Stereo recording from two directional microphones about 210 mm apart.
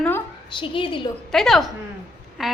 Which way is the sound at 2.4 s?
Centre (ahead or behind).